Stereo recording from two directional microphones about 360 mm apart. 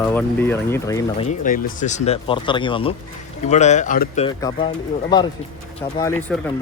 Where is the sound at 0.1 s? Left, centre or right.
Centre.